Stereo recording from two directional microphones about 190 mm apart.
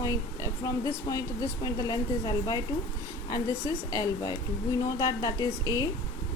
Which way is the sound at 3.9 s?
20° left (ahead or behind).